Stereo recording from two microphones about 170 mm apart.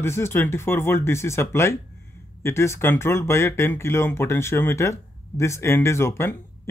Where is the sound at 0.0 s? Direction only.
15° left (ahead or behind).